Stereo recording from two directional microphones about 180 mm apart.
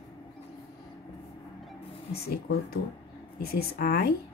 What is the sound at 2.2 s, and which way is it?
Speech, 60° left (ahead or behind).